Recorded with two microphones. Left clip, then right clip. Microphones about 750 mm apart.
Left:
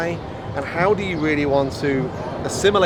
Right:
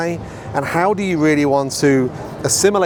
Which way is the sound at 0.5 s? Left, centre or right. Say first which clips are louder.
Right 3 dB; right.